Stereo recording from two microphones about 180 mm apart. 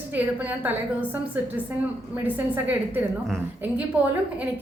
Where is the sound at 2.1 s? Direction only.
10° right (ahead or behind).